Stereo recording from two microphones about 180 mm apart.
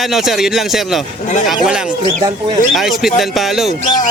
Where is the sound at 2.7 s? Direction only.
Centre (ahead or behind).